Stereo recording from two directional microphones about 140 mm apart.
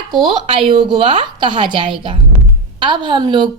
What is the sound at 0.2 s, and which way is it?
A woman's voice, 40° right (ahead or behind).